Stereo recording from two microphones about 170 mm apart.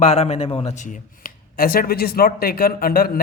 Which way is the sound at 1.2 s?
60° left (ahead or behind).